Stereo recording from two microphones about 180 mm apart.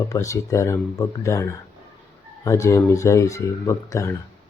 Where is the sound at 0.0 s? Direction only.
15° left (ahead or behind).